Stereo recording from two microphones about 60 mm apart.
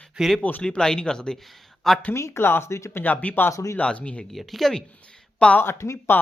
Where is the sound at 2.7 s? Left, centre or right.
Left.